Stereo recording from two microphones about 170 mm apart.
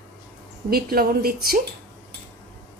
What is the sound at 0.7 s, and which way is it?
Speech, 65° right (ahead or behind).